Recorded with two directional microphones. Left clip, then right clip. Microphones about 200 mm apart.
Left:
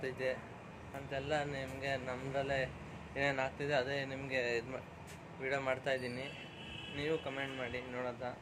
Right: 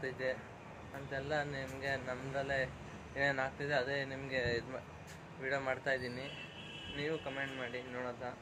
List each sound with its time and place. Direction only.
0.0 s speech: 10° left (ahead or behind)